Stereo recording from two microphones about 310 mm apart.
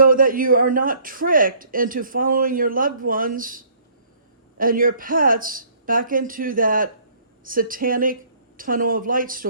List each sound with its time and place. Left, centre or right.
0.0 s a man's voice: right